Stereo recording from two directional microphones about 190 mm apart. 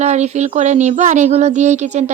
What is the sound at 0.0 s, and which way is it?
Speech, 35° right (ahead or behind).